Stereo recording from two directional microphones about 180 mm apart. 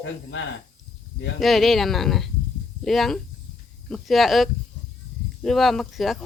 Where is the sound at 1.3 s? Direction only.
Centre (ahead or behind).